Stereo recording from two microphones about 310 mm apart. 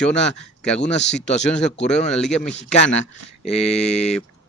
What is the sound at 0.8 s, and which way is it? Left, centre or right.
Speech, left.